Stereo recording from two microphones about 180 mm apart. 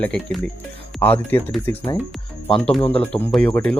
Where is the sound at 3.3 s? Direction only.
5° left (ahead or behind).